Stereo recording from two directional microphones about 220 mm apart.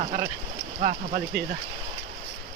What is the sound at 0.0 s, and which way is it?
Speech, 30° right (ahead or behind).